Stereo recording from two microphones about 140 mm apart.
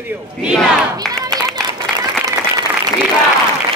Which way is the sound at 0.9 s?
25° right (ahead or behind).